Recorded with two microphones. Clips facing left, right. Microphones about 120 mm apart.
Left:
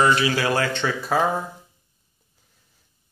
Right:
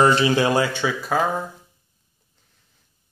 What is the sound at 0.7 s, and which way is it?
Speech, 5° right (ahead or behind).